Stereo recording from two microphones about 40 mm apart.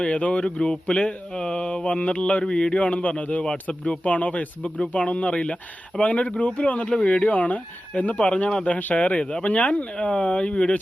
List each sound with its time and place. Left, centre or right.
0.0 s speech: left
2.8 s speech: left
6.8 s speech: left